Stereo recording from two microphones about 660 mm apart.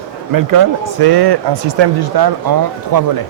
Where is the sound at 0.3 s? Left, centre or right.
Right.